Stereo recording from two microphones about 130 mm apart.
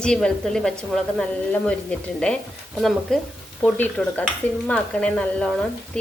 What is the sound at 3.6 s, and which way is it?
Dishes, 15° left (ahead or behind).